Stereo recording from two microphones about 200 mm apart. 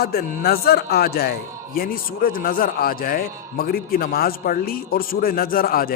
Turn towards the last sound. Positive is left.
turn(degrees=45)  # may be behind; listen again after turning